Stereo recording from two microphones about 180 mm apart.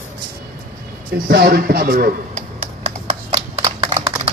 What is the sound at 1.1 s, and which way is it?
Speech, 55° right (ahead or behind).